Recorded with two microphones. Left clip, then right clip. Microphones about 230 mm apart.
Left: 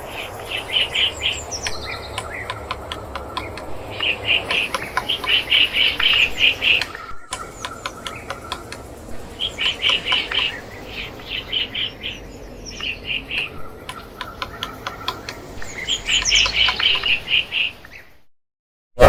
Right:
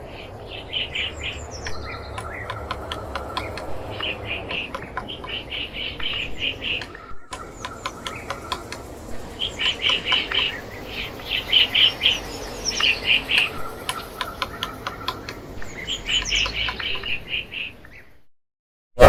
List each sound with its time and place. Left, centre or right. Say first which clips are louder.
0.2 s bird: left 12 dB; left; by 4.3 s centre
4.4 s bird: left 8 dB; left
7.3 s squeal: left 3 dB; centre
7.9 s a sound: right 2 dB; centre
9.4 s bird: left 2 dB; centre
14.3 s tick-tock: even; centre
15.8 s bird: left 4 dB; centre; by 17.7 s left
19.0 s a sound: even; centre